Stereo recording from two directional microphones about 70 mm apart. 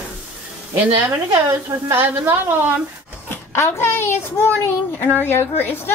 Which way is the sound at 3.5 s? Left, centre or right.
Left.